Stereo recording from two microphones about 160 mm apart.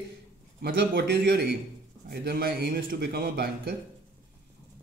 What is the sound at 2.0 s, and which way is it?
A man's voice, 70° right (ahead or behind).